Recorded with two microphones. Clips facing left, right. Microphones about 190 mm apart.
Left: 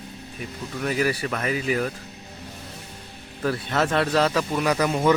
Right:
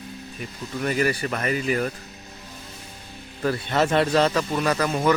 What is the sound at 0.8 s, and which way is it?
Speech, centre (ahead or behind).